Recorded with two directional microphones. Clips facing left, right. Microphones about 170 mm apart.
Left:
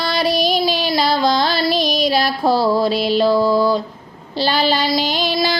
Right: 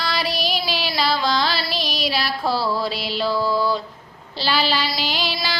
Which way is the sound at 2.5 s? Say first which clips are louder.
Left 8 dB; 45° left (ahead or behind).